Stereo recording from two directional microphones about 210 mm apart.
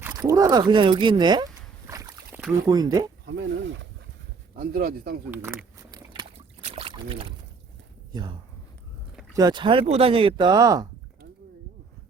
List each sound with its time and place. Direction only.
0.0 s speech: 15° right (ahead or behind)
1.9 s boat: 15° right (ahead or behind)
2.6 s speech: 20° right (ahead or behind)
3.5 s speech: 60° right (ahead or behind)
4.5 s speech: 45° right (ahead or behind)
5.3 s rowboat: 10° right (ahead or behind)
6.7 s boat: 30° right (ahead or behind)
8.1 s speech: 20° right (ahead or behind)